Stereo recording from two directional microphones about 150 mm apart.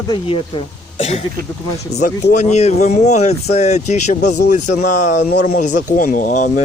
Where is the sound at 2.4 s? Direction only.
50° left (ahead or behind).